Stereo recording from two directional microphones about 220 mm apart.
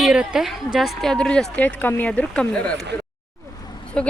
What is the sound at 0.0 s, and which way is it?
Speech, 5° right (ahead or behind).